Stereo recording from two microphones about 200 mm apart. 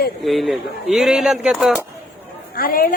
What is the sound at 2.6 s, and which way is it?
Speech, 45° left (ahead or behind).